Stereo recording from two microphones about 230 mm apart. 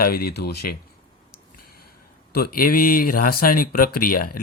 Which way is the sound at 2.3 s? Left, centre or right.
Left.